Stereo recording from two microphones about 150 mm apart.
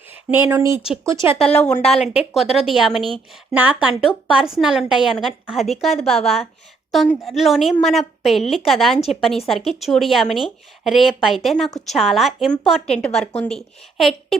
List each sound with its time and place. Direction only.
0.3 s speech: 15° right (ahead or behind)
1.6 s a woman's voice: 5° left (ahead or behind)